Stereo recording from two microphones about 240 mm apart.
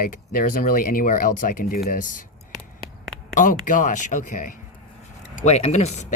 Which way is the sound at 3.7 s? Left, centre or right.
Left.